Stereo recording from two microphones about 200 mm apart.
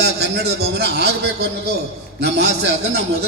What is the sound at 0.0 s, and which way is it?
A man's voice, 55° right (ahead or behind).